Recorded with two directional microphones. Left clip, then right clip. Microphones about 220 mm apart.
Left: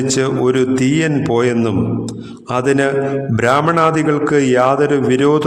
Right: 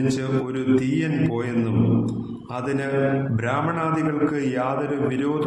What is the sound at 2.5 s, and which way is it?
A man's voice, 45° left (ahead or behind).